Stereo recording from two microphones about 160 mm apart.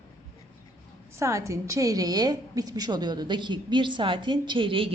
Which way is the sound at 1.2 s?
20° right (ahead or behind).